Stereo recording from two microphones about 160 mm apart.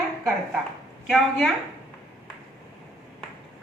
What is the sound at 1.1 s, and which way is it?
Speech, centre (ahead or behind).